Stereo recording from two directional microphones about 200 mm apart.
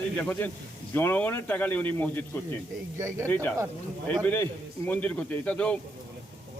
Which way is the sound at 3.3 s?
10° left (ahead or behind).